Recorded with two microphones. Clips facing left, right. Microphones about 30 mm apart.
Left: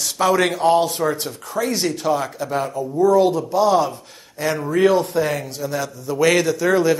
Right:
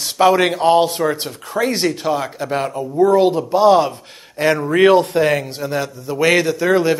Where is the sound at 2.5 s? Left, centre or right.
Right.